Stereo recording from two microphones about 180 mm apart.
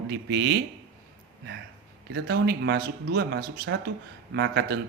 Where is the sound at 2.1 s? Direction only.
65° right (ahead or behind).